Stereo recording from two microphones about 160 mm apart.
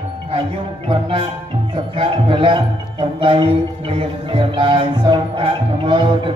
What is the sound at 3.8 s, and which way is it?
Music, 35° right (ahead or behind).